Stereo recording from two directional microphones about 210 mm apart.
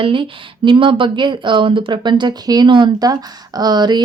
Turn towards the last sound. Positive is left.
turn(degrees=-20)  # may be behind; listen again after turning